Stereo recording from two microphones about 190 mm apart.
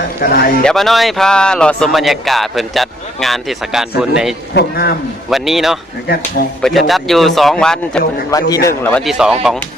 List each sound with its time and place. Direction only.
0.2 s speech: 50° left (ahead or behind)
0.6 s speech: centre (ahead or behind)
4.5 s a man's voice: 55° left (ahead or behind)
5.3 s speech: centre (ahead or behind)
8.3 s a man's voice: 20° left (ahead or behind)
8.6 s speech: 10° left (ahead or behind)